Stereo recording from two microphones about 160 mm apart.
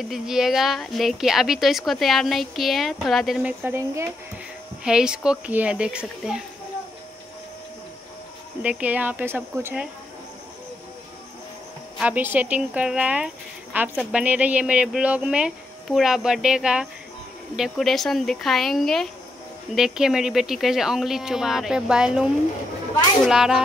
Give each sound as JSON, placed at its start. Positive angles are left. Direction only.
{"t": 0.1, "sound": "speech", "side_deg": 0}
{"t": 3.6, "sound": "speech", "side_deg": -15}
{"t": 4.8, "sound": "speech", "side_deg": -5}
{"t": 8.6, "sound": "speech", "side_deg": -10}
{"t": 12.0, "sound": "speech", "side_deg": -10}